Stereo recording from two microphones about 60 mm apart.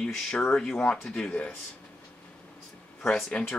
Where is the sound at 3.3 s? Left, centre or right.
Left.